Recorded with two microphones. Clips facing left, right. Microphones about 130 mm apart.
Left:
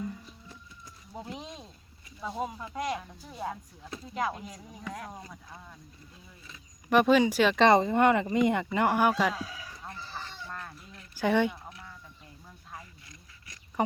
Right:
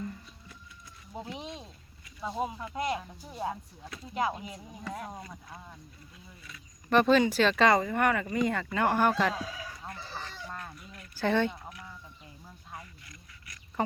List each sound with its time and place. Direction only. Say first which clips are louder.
1.1 s speech: right 1 dB; centre (ahead or behind)
6.9 s speech: left 1 dB; 10° left (ahead or behind)
7.6 s speech: left 5 dB; 25° left (ahead or behind)
11.1 s speech: left 2 dB; 15° left (ahead or behind)
12.8 s duck: right 1 dB; 25° left (ahead or behind)